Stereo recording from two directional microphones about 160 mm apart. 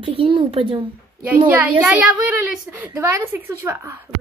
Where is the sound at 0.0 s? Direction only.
35° right (ahead or behind).